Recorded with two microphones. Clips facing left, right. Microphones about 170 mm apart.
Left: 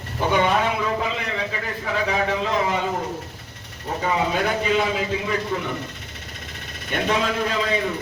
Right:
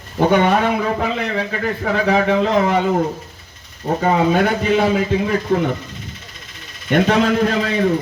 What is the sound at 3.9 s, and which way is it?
Speech, 55° right (ahead or behind).